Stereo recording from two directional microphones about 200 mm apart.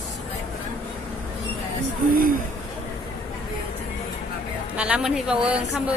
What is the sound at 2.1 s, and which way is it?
Speech, 45° right (ahead or behind).